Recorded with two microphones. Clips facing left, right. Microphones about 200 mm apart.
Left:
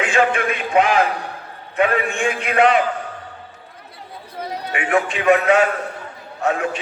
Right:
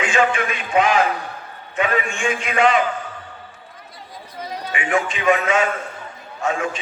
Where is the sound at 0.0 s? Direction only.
55° left (ahead or behind).